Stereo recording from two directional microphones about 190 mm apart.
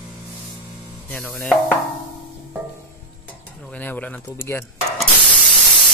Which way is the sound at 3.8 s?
10° left (ahead or behind).